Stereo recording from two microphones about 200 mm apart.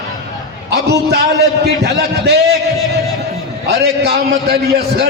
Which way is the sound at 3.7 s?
55° right (ahead or behind).